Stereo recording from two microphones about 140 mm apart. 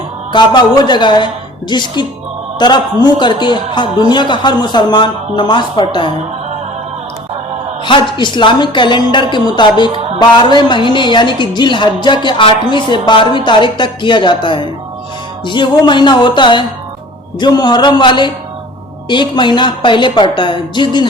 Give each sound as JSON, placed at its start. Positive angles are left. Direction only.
{"t": 0.3, "sound": "a woman's voice", "side_deg": 30}
{"t": 7.9, "sound": "a woman's voice", "side_deg": 35}
{"t": 9.9, "sound": "music", "side_deg": -45}
{"t": 10.2, "sound": "a woman's voice", "side_deg": 30}
{"t": 15.9, "sound": "a woman's voice", "side_deg": 35}